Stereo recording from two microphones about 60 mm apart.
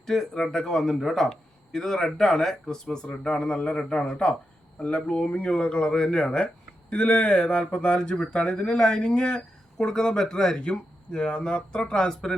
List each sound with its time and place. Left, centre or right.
0.0 s speech: centre